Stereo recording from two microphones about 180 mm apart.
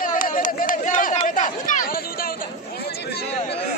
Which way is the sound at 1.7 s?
50° left (ahead or behind).